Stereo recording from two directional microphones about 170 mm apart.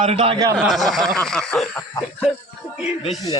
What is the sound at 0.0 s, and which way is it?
Speech, 35° right (ahead or behind).